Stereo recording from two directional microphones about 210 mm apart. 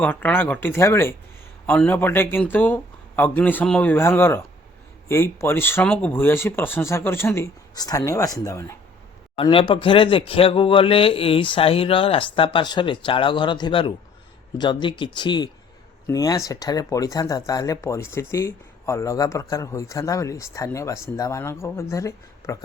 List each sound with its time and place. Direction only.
0.0 s speech: 10° left (ahead or behind)